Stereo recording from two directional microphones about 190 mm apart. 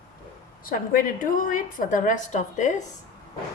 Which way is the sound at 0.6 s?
45° left (ahead or behind).